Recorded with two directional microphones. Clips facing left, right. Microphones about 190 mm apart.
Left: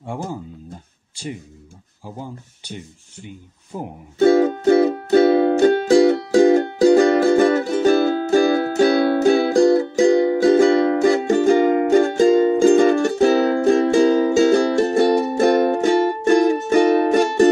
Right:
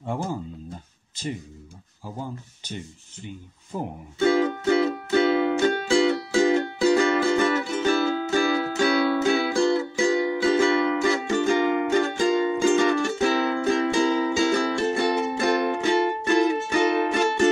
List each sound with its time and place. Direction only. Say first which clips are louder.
0.0 s speech: left 1 dB; 10° left (ahead or behind)
4.2 s music: left 7 dB; 45° left (ahead or behind)